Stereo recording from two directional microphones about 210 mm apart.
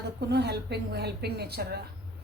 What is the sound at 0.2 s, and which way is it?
Speech, 55° right (ahead or behind).